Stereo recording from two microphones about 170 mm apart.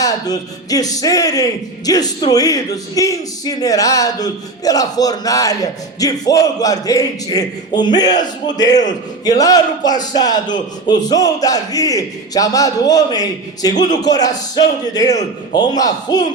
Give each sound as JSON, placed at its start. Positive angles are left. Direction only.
{"t": 0.0, "sound": "speech", "side_deg": 20}